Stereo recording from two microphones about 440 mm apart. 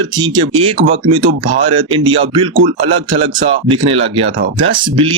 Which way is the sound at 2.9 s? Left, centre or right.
Right.